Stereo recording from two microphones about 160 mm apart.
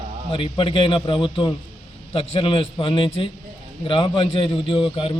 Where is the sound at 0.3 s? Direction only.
35° left (ahead or behind).